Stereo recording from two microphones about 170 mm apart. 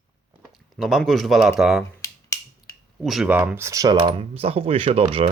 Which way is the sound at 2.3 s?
20° left (ahead or behind).